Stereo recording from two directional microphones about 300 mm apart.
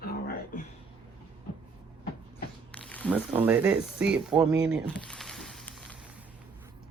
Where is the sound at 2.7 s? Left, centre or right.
Centre.